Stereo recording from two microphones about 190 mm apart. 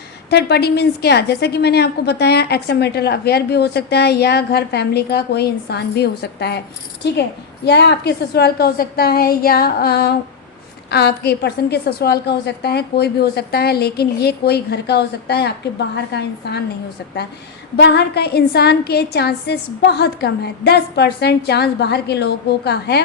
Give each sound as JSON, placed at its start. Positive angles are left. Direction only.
{"t": 0.3, "sound": "a woman's voice", "side_deg": 60}
{"t": 17.7, "sound": "a woman's voice", "side_deg": 60}